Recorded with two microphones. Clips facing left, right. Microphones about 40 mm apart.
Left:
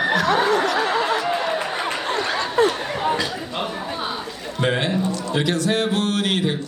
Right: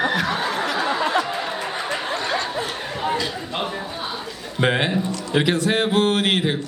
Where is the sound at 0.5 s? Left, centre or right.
Right.